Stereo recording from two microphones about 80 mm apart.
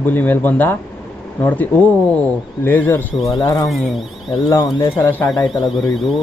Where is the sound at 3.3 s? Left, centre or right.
Left.